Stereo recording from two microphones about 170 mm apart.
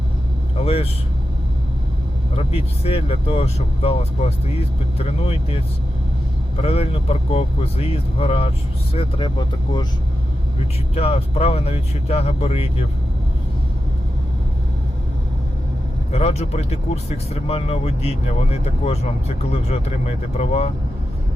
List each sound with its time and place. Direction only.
0.5 s vehicle: 35° left (ahead or behind)
2.3 s speech: 35° left (ahead or behind)
6.6 s speech: 35° left (ahead or behind)
10.9 s speech: 35° left (ahead or behind)
16.1 s speech: 35° left (ahead or behind)